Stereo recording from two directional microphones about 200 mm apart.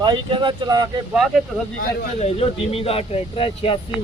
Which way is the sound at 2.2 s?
30° left (ahead or behind).